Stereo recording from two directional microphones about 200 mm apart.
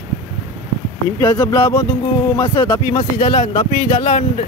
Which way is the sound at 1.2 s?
20° left (ahead or behind).